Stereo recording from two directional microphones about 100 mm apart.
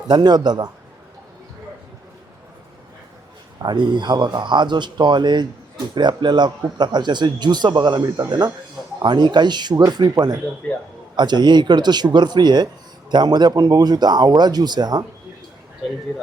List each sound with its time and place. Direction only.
0.1 s speech: 45° right (ahead or behind)
3.6 s speech: 50° right (ahead or behind)